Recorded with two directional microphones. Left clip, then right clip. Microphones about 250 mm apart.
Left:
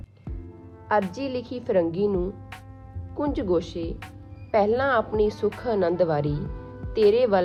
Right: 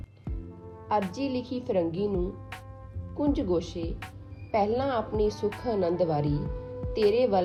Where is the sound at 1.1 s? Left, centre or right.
Left.